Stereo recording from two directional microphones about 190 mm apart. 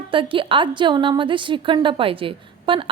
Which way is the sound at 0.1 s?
25° right (ahead or behind).